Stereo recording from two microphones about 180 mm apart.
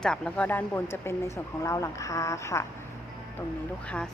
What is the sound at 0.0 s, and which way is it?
Speech, 5° left (ahead or behind).